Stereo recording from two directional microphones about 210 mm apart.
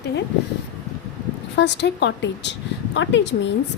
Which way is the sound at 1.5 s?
55° left (ahead or behind).